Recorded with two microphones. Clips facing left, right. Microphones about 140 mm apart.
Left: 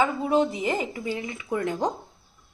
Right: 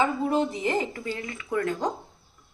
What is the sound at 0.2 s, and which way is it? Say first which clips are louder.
Speech: left 2 dB; 10° left (ahead or behind).